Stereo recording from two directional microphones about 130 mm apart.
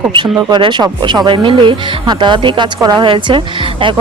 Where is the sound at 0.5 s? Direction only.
35° right (ahead or behind).